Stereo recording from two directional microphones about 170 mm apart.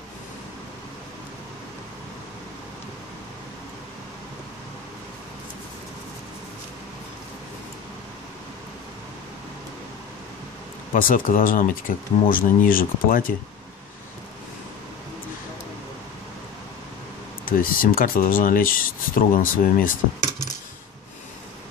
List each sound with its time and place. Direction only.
11.0 s speech: 55° left (ahead or behind)
17.5 s speech: 55° left (ahead or behind)